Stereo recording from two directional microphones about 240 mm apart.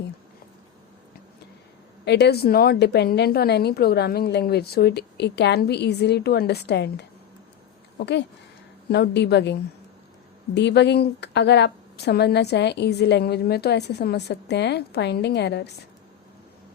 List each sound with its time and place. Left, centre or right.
2.0 s a woman's voice: left